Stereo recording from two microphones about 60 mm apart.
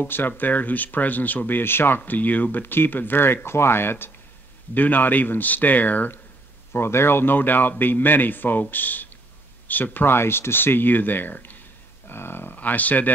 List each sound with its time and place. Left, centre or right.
0.0 s speech: left
2.0 s speech: left
6.7 s speech: left